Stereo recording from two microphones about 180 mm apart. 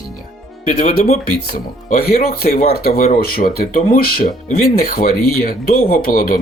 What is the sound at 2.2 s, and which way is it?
Speech, 50° left (ahead or behind).